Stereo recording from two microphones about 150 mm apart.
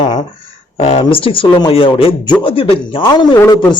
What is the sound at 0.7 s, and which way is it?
A man's voice, 40° left (ahead or behind).